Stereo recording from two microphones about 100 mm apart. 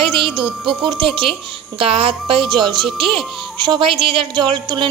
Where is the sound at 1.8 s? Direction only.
70° right (ahead or behind).